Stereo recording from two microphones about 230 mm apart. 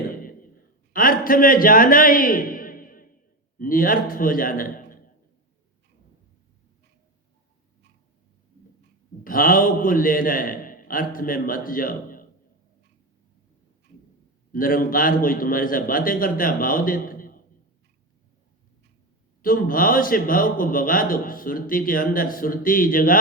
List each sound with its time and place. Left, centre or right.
0.1 s a sound: left
0.9 s a man's voice: left
9.2 s a man's voice: left
14.5 s a man's voice: left
19.4 s a man's voice: left